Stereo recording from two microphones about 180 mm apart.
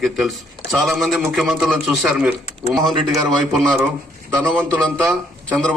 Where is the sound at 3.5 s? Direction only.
Centre (ahead or behind).